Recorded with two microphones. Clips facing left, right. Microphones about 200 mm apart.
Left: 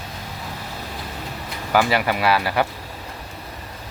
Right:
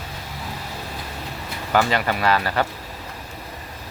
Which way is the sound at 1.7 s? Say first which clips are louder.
Left 1 dB; 10° left (ahead or behind).